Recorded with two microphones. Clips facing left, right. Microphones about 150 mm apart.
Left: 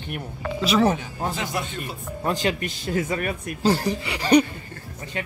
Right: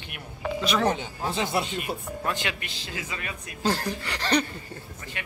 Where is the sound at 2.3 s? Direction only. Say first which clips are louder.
Left 8 dB; 35° left (ahead or behind).